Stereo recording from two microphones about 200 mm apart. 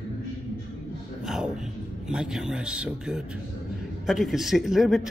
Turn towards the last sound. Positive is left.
turn(degrees=0)  # may be behind; listen again after turning